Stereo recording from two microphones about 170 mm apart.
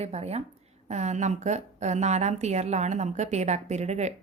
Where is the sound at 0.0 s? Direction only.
40° right (ahead or behind).